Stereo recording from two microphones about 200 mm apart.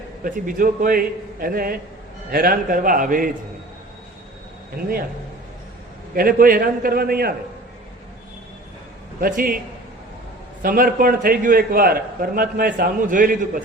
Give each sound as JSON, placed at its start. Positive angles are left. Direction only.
{"t": 0.3, "sound": "a man's voice", "side_deg": -45}
{"t": 6.1, "sound": "a man's voice", "side_deg": -45}
{"t": 9.2, "sound": "a man's voice", "side_deg": -45}
{"t": 10.6, "sound": "a man's voice", "side_deg": -45}